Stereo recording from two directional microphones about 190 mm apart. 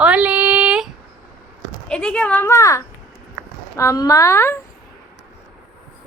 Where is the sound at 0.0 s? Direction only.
5° right (ahead or behind).